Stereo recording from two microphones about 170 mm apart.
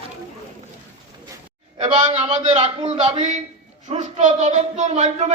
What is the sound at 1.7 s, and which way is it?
A man's voice, 35° right (ahead or behind).